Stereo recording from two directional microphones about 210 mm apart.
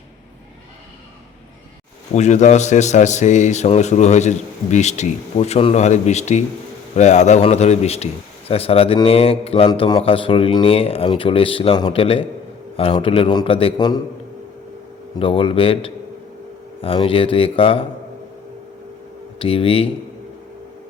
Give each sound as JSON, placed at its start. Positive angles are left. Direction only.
{"t": 2.1, "sound": "a man's voice", "side_deg": 35}
{"t": 15.2, "sound": "speech", "side_deg": 25}
{"t": 19.4, "sound": "speech", "side_deg": 25}